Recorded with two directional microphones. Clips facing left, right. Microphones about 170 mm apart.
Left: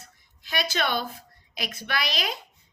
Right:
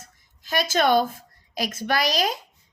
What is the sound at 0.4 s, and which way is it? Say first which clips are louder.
A woman's voice: right 7 dB; 45° right (ahead or behind).